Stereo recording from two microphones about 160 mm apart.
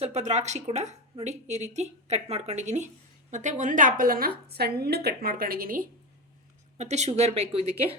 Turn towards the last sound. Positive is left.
turn(degrees=-40)  # may be behind; listen again after turning